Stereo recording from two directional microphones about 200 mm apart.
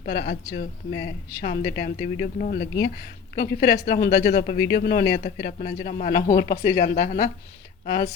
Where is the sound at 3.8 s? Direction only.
50° left (ahead or behind).